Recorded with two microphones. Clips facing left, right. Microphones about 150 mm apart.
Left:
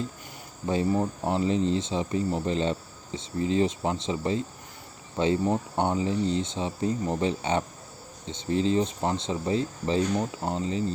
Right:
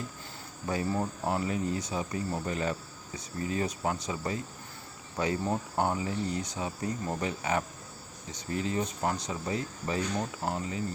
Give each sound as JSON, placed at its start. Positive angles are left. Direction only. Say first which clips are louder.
{"t": 0.7, "sound": "speech", "louder": "left 5 dB", "side_deg": 20}